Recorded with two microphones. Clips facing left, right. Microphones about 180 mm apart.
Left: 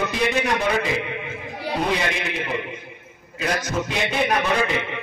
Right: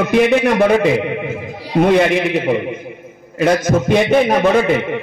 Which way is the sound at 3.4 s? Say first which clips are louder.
Right 11 dB; 50° right (ahead or behind).